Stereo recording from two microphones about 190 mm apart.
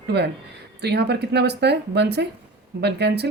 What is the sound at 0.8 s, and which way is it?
A woman's voice, 60° right (ahead or behind).